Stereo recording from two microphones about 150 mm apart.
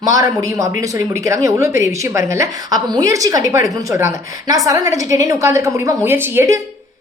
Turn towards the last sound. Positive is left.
turn(degrees=-20)  # may be behind; listen again after turning